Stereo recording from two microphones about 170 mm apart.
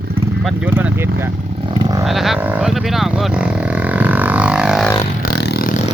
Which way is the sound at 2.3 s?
10° right (ahead or behind).